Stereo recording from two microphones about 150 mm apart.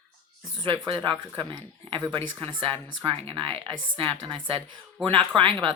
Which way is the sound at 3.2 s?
40° right (ahead or behind).